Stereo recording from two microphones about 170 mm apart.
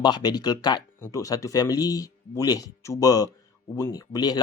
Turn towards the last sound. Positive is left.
turn(degrees=20)  # may be behind; listen again after turning